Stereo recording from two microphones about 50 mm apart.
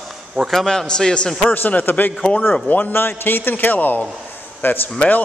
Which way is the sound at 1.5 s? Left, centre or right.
Left.